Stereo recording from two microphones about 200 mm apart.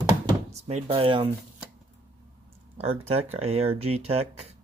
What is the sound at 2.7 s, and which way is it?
Speech, 30° right (ahead or behind).